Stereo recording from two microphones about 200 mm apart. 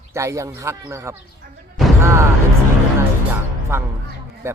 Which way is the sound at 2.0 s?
15° right (ahead or behind).